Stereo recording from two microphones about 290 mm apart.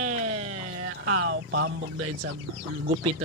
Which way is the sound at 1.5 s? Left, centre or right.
Right.